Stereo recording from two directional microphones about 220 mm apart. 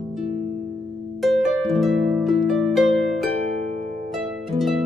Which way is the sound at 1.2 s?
Centre (ahead or behind).